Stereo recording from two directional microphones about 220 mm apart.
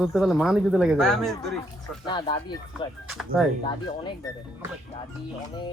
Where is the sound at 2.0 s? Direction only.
20° left (ahead or behind).